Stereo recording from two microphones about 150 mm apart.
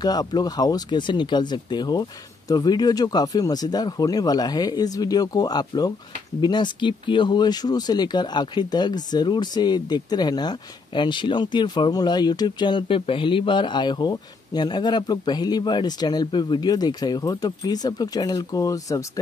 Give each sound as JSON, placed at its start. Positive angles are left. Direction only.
{"t": 0.0, "sound": "speech", "side_deg": 25}